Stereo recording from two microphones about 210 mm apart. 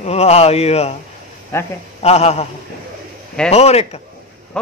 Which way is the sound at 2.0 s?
30° left (ahead or behind).